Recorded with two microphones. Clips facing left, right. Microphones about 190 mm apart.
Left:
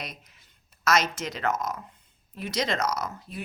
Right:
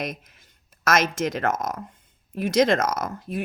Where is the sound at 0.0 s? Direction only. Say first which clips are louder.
Right 9 dB; 50° right (ahead or behind).